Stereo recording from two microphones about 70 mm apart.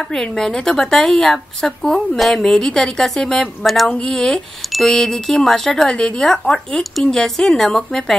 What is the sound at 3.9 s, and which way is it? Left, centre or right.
Speech, centre.